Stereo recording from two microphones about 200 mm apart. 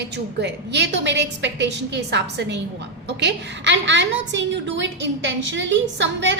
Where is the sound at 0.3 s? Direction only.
60° right (ahead or behind).